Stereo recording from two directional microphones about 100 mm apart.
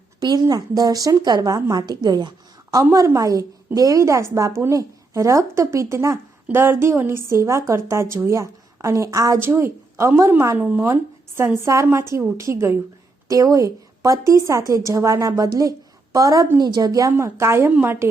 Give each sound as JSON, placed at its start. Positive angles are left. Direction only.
{"t": 0.2, "sound": "a woman's voice", "side_deg": -40}
{"t": 3.2, "sound": "a woman's voice", "side_deg": -35}
{"t": 10.6, "sound": "a woman's voice", "side_deg": -15}
{"t": 17.1, "sound": "a woman's voice", "side_deg": -25}